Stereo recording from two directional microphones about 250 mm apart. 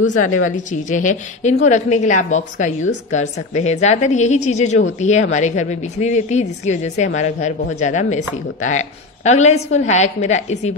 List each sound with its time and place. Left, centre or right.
0.0 s a woman's voice: left